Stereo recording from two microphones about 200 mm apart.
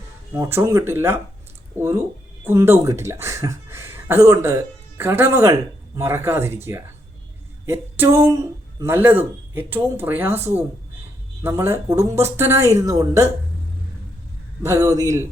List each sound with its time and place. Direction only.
0.3 s speech: 15° right (ahead or behind)
11.4 s speech: 10° right (ahead or behind)
14.6 s speech: 15° right (ahead or behind)